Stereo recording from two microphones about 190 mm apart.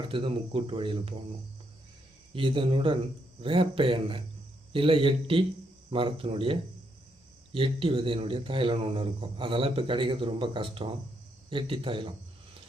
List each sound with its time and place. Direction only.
0.0 s a man's voice: 25° right (ahead or behind)
2.3 s a man's voice: 25° right (ahead or behind)